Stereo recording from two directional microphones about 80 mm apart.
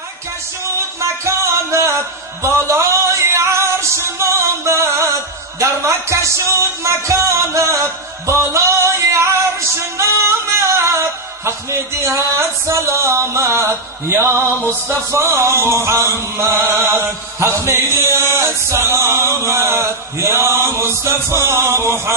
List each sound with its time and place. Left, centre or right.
1.2 s music: right
5.5 s chant: right
8.3 s singing: right
12.6 s chant: right